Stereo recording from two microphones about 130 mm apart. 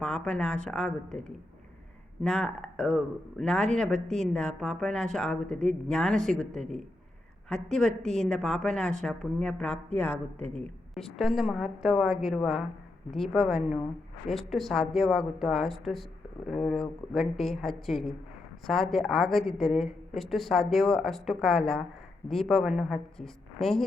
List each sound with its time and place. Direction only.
0.0 s a woman's voice: 10° left (ahead or behind)
2.2 s speech: 5° left (ahead or behind)
10.3 s a woman's voice: 55° right (ahead or behind)
10.6 s a woman's voice: 5° left (ahead or behind)